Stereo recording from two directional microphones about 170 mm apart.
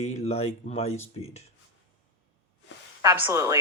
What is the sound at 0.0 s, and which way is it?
Speech, 40° left (ahead or behind).